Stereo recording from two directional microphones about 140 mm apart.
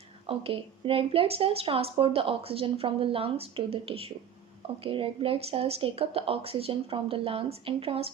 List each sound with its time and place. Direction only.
0.3 s a woman's voice: 40° right (ahead or behind)